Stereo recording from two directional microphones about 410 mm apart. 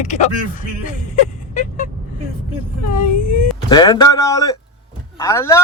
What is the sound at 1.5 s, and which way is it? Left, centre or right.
Vehicle, centre.